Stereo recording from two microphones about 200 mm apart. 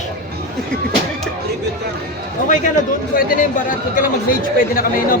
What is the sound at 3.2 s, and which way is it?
Speech, 40° left (ahead or behind).